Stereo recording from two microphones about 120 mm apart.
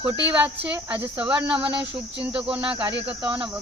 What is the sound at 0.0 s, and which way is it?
Cricket, 15° right (ahead or behind).